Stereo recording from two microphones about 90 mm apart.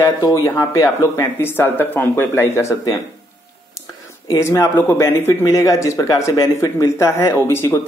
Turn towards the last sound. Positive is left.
turn(degrees=25)  # may be behind; listen again after turning